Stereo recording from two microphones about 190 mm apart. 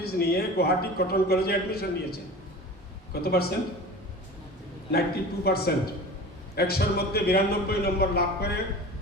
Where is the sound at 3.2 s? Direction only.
55° left (ahead or behind).